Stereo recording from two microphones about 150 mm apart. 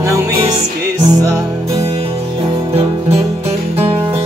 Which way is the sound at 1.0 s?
20° right (ahead or behind).